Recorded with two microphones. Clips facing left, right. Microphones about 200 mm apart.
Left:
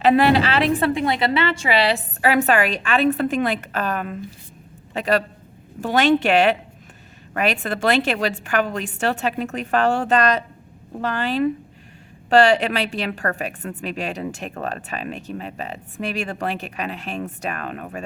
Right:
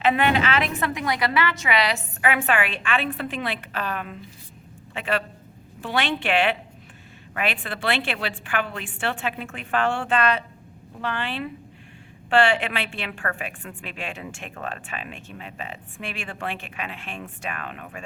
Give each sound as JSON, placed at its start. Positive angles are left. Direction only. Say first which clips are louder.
{"t": 0.0, "sound": "a woman's voice", "louder": "left 5 dB", "side_deg": 35}